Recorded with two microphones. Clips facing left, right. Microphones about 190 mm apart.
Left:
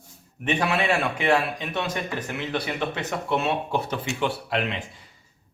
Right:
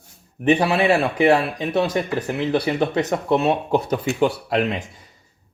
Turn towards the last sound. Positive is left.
turn(degrees=-40)  # may be behind; listen again after turning